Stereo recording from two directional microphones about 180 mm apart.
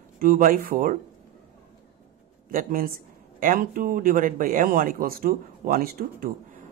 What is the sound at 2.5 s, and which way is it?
Speech, 55° right (ahead or behind).